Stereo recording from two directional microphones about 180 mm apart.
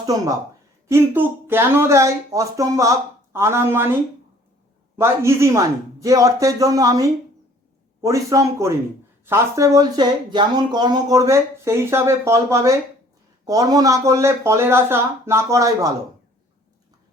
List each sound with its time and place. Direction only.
0.0 s a woman's voice: 20° right (ahead or behind)
4.9 s speech: 15° right (ahead or behind)